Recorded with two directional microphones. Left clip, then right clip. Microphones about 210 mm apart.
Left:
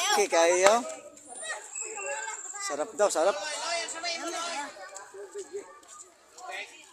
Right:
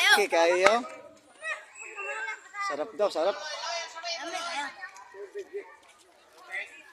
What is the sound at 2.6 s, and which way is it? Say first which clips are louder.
Speech: left 1 dB; centre (ahead or behind).